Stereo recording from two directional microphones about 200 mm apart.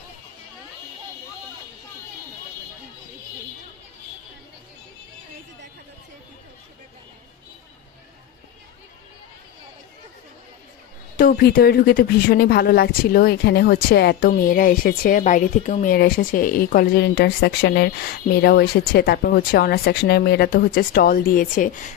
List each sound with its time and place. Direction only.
11.1 s speech: 50° left (ahead or behind)